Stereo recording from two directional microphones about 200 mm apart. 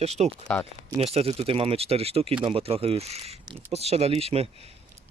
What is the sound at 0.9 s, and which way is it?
Speech, 30° right (ahead or behind).